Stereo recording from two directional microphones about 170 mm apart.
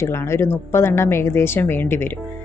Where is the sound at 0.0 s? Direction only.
15° left (ahead or behind).